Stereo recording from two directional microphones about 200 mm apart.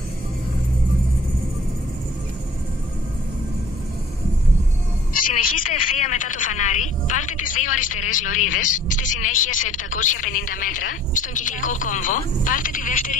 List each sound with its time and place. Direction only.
5.1 s a woman's voice: 40° left (ahead or behind)